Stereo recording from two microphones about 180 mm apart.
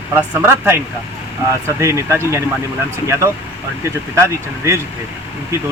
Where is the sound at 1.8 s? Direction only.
15° right (ahead or behind).